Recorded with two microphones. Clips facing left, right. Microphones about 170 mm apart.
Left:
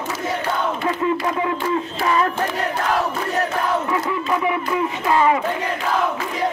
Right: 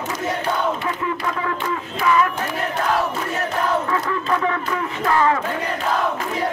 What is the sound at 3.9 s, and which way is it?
Speech, 15° left (ahead or behind).